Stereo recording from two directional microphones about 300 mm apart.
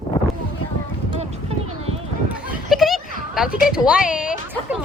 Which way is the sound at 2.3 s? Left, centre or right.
Centre.